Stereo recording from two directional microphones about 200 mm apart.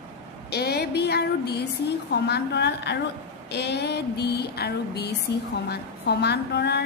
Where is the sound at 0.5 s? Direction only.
55° left (ahead or behind).